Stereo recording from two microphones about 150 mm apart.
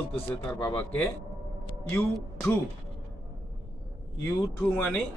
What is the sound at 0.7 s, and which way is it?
A man's voice, 10° left (ahead or behind).